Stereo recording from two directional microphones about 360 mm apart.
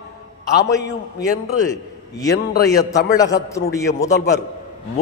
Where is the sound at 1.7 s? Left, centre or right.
Centre.